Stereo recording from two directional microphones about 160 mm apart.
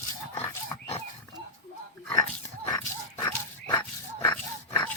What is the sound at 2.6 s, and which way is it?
Dog, 20° left (ahead or behind).